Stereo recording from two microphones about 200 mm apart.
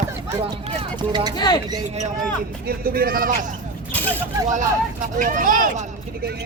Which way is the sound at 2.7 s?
50° right (ahead or behind).